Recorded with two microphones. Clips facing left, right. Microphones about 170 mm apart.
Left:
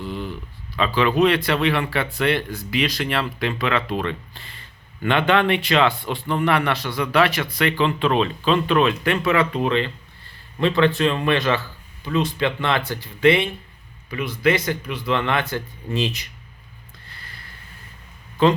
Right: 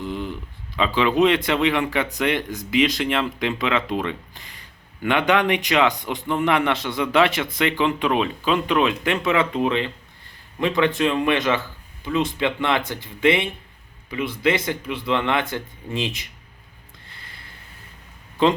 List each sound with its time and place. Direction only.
0.0 s a sound: 20° right (ahead or behind)
0.8 s speech: 15° right (ahead or behind)
17.1 s snort: 20° right (ahead or behind)